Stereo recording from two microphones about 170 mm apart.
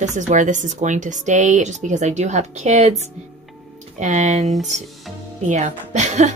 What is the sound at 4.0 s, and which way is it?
Speech, 45° right (ahead or behind).